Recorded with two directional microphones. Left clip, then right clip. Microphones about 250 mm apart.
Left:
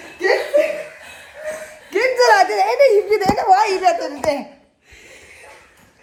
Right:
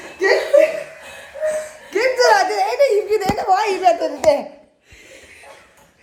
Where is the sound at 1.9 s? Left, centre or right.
Centre.